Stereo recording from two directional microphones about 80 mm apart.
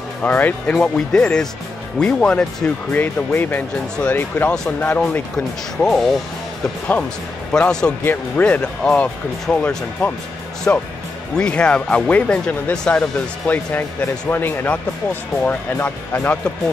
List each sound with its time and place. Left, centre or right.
0.2 s speech: left
0.7 s speech: centre
5.8 s speech: centre
7.5 s speech: centre
8.0 s speech: left
10.7 s speech: left
11.3 s speech: centre
13.5 s speech: centre